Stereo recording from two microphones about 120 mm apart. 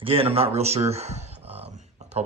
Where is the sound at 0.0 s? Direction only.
50° right (ahead or behind).